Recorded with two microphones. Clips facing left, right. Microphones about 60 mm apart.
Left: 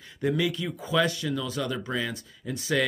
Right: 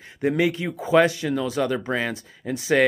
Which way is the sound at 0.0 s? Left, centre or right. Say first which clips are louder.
Right 5 dB; right.